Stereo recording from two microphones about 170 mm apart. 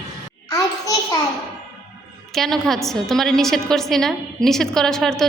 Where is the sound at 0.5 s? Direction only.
20° left (ahead or behind).